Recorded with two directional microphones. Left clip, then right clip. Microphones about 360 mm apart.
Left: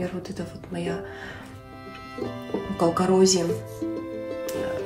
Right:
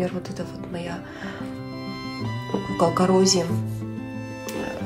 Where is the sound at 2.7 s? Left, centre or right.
Centre.